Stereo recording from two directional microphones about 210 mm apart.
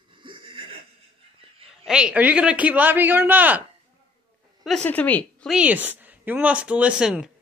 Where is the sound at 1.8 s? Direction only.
5° right (ahead or behind).